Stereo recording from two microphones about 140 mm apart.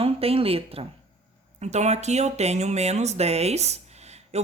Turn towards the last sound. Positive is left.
turn(degrees=-50)  # may be behind; listen again after turning